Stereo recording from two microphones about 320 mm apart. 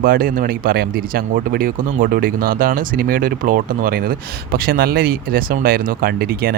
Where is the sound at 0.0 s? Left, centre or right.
Right.